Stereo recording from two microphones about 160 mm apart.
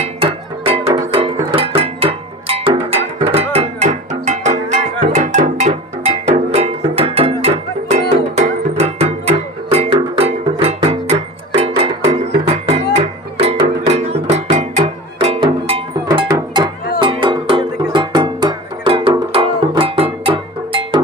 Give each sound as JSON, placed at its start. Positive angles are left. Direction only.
{"t": 0.0, "sound": "music", "side_deg": -35}
{"t": 3.0, "sound": "cowbell", "side_deg": -40}
{"t": 6.5, "sound": "music", "side_deg": -40}